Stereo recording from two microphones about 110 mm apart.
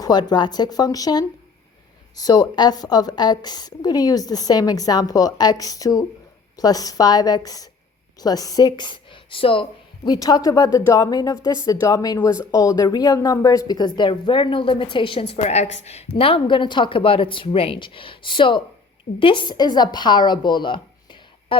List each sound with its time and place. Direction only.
0.0 s a woman's voice: 40° left (ahead or behind)
10.1 s a woman's voice: 35° left (ahead or behind)